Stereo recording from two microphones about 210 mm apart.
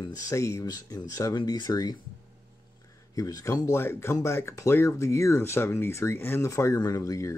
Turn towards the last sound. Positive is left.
turn(degrees=15)  # may be behind; listen again after turning